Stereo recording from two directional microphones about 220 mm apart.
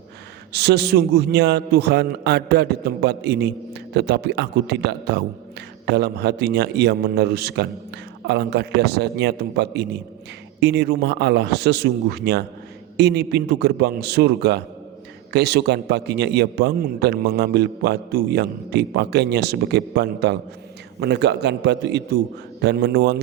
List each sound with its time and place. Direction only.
0.5 s a man's voice: 50° right (ahead or behind)